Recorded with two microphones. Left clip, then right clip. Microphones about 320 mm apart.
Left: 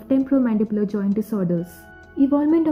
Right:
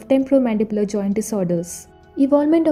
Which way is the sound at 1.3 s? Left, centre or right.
Right.